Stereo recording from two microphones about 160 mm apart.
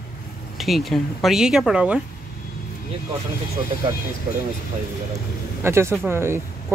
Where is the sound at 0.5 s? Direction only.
Centre (ahead or behind).